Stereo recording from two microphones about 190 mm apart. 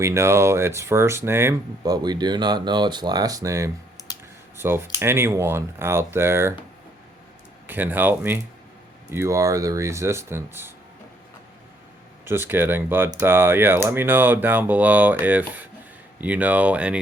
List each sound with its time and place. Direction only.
0.0 s speech: 15° right (ahead or behind)
4.1 s computer keyboard: 20° left (ahead or behind)
4.5 s speech: 10° right (ahead or behind)
7.7 s speech: 10° right (ahead or behind)
12.2 s speech: 10° right (ahead or behind)